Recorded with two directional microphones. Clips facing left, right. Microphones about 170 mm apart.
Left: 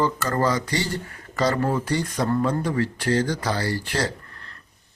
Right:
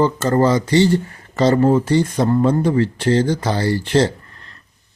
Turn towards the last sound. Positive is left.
turn(degrees=-25)  # may be behind; listen again after turning